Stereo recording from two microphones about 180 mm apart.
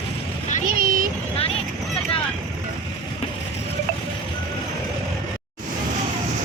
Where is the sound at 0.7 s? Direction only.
50° right (ahead or behind).